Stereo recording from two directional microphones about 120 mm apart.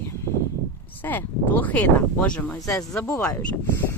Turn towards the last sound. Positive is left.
turn(degrees=20)  # may be behind; listen again after turning